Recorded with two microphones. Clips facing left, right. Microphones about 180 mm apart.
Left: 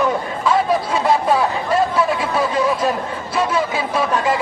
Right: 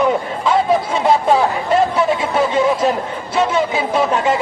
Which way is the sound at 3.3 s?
25° right (ahead or behind).